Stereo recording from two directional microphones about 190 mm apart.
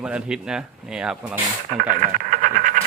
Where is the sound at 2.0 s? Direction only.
45° right (ahead or behind).